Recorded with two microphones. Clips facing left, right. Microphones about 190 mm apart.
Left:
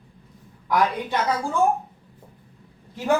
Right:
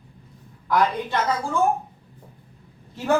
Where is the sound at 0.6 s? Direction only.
15° left (ahead or behind).